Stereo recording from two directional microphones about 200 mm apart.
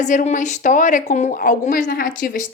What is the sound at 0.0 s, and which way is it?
A woman's voice, 40° left (ahead or behind).